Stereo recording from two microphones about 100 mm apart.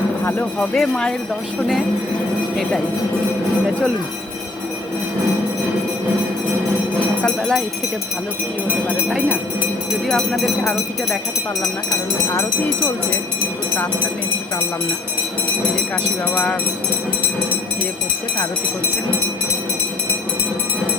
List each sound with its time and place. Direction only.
0.3 s speech: 15° left (ahead or behind)
7.2 s speech: 5° left (ahead or behind)
10.1 s speech: 5° left (ahead or behind)